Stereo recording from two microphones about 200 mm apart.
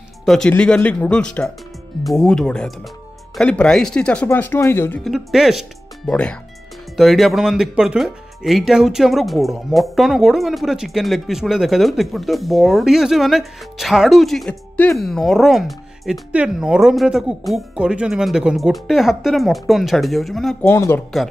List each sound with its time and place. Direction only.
0.2 s speech: centre (ahead or behind)
5.1 s speech: centre (ahead or behind)
20.7 s speech: 15° left (ahead or behind)